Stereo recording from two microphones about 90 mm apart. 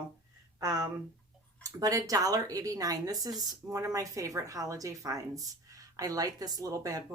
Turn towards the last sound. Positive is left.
turn(degrees=-40)  # may be behind; listen again after turning